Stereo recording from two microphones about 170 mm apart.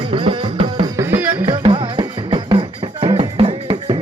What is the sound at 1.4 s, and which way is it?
Music, 30° right (ahead or behind).